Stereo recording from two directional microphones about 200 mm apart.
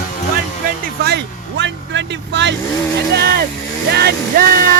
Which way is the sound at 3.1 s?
50° right (ahead or behind).